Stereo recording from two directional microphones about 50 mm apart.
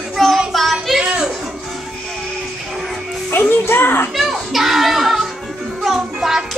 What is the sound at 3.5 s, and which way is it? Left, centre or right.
Music, left.